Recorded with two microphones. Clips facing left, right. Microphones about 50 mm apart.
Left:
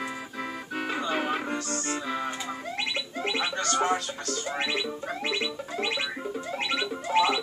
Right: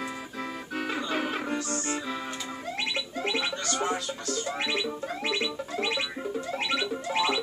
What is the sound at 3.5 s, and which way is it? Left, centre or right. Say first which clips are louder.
Music: left 4 dB; left.